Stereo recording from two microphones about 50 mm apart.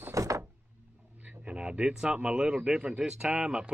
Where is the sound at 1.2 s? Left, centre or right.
Right.